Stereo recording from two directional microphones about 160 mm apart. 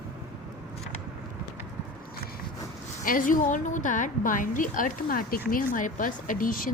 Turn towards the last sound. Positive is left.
turn(degrees=60)  # may be behind; listen again after turning